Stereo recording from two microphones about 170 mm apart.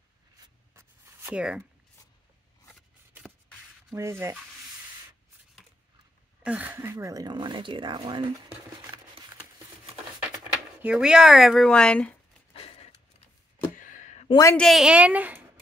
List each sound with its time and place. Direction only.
0.4 s writing: 15° right (ahead or behind)
3.9 s a woman's voice: 15° right (ahead or behind)
6.4 s speech: 10° right (ahead or behind); by 8.2 s 30° right (ahead or behind)
10.3 s speech: 5° right (ahead or behind)
12.5 s a sound: 35° left (ahead or behind)
13.7 s a sound: 50° left (ahead or behind)
14.3 s a woman's voice: 15° left (ahead or behind)
14.6 s a woman's voice: centre (ahead or behind)